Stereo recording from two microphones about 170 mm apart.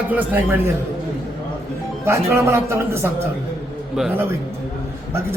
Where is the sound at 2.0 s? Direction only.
15° right (ahead or behind).